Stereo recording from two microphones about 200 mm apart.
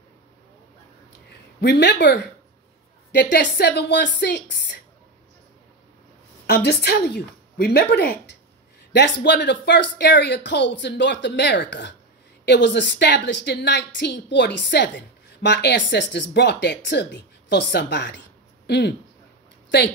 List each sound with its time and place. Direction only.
1.6 s a woman's voice: 55° left (ahead or behind)
3.2 s a woman's voice: 60° left (ahead or behind)
6.4 s a woman's voice: 55° left (ahead or behind)